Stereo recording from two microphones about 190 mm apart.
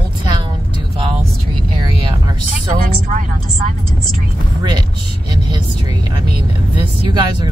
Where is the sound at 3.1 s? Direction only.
45° right (ahead or behind).